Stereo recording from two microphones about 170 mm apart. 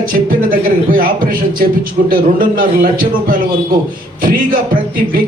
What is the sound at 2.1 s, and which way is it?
Speech, 55° right (ahead or behind).